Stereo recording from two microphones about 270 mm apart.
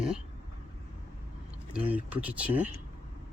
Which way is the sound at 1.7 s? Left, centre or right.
Centre.